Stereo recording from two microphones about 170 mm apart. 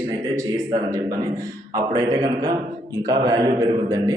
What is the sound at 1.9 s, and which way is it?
Speech, 20° right (ahead or behind).